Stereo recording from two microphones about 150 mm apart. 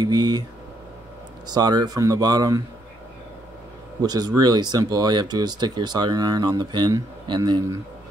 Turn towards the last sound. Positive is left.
turn(degrees=-30)  # may be behind; listen again after turning